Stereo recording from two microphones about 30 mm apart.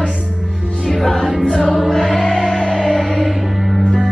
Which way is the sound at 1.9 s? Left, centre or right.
Centre.